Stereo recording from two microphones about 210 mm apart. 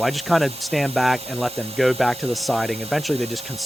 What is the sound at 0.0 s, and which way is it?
Speech, centre (ahead or behind).